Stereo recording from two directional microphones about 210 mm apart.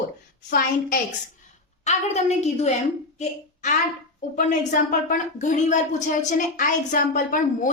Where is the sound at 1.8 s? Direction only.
30° left (ahead or behind).